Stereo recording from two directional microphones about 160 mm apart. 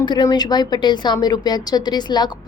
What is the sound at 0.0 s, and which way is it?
A woman's voice, 25° left (ahead or behind).